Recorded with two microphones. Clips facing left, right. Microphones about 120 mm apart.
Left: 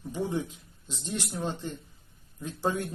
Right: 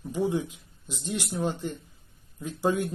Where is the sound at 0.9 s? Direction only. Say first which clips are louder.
Right 3 dB; 15° right (ahead or behind).